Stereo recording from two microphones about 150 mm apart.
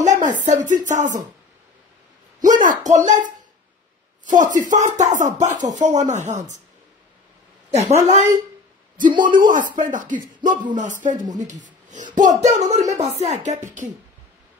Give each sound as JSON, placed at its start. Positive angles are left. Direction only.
{"t": 0.0, "sound": "speech", "side_deg": -55}
{"t": 2.4, "sound": "speech", "side_deg": -60}
{"t": 4.3, "sound": "a woman's voice", "side_deg": -55}
{"t": 7.7, "sound": "a woman's voice", "side_deg": -50}
{"t": 9.1, "sound": "speech", "side_deg": -30}
{"t": 9.4, "sound": "a woman's voice", "side_deg": -60}